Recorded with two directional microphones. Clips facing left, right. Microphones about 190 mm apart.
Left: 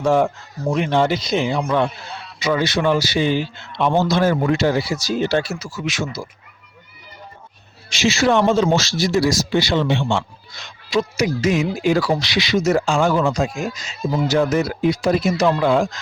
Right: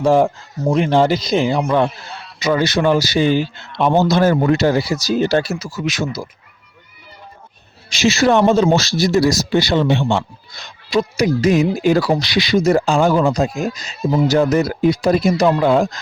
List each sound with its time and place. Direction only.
0.0 s a man's voice: 35° right (ahead or behind)
7.9 s a man's voice: 40° right (ahead or behind)